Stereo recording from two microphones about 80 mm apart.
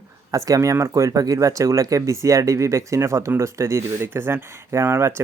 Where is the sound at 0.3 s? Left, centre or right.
Right.